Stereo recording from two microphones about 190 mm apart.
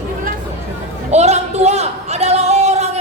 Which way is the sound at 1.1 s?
35° right (ahead or behind).